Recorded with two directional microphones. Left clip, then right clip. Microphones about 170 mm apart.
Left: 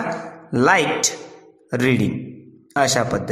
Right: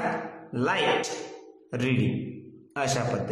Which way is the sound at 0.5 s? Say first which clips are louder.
Left 8 dB; 45° left (ahead or behind).